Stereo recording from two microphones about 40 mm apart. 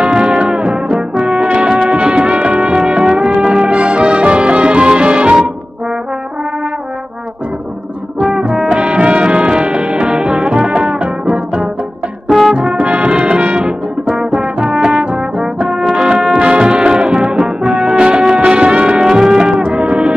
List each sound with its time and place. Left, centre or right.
0.1 s music: right
1.1 s brass instrument: right
1.8 s music: right
8.2 s brass instrument: right
12.3 s brass instrument: centre
12.5 s brass instrument: right
17.6 s music: right
19.0 s music: centre